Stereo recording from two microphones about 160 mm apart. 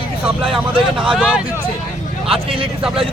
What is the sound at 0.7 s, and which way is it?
Speech, 30° right (ahead or behind).